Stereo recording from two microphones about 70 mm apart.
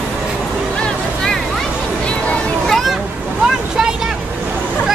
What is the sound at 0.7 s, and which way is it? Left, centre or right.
Music, centre.